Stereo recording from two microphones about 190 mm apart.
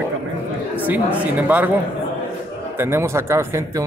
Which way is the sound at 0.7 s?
10° right (ahead or behind).